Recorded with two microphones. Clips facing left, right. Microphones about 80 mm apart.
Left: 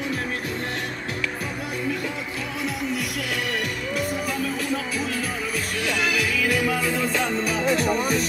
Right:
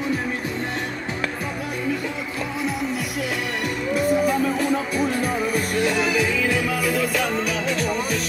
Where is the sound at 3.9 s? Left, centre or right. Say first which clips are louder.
Right 9 dB; right.